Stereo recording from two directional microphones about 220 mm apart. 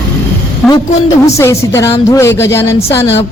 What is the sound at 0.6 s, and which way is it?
A woman's voice, centre (ahead or behind).